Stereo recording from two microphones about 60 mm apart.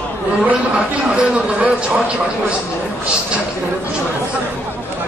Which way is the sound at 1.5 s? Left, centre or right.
Centre.